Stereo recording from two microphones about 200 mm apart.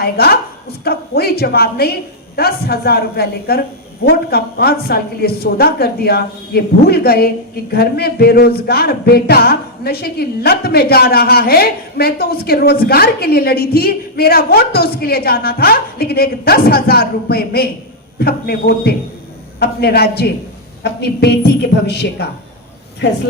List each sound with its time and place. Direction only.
0.0 s a woman's voice: 50° left (ahead or behind)